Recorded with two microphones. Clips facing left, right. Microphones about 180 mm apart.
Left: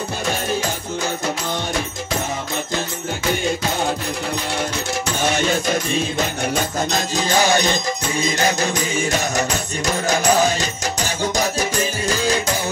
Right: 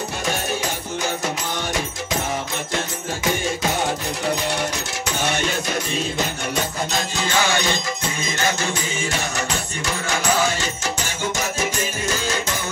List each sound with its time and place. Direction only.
6.9 s music: 40° left (ahead or behind)
10.0 s music: 40° left (ahead or behind)